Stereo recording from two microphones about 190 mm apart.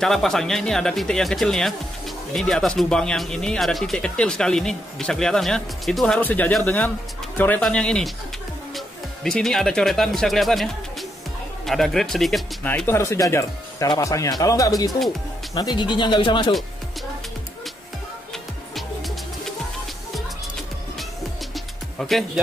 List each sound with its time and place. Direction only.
0.0 s speech: centre (ahead or behind); by 16.5 s 25° left (ahead or behind)
21.5 s music: centre (ahead or behind)